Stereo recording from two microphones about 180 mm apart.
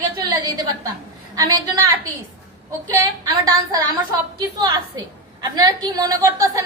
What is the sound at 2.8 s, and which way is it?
A woman's voice, 20° right (ahead or behind).